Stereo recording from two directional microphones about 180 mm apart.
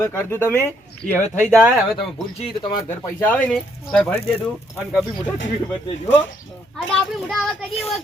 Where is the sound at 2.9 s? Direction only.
10° left (ahead or behind).